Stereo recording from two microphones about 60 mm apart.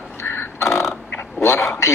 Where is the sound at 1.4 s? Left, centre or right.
Left.